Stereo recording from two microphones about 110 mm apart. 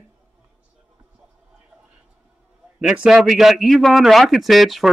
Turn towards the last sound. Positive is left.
turn(degrees=0)  # may be behind; listen again after turning